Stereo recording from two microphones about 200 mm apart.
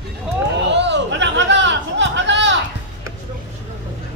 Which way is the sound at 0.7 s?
60° right (ahead or behind).